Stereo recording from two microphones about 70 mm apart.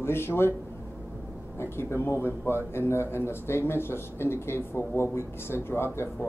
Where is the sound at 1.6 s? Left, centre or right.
Left.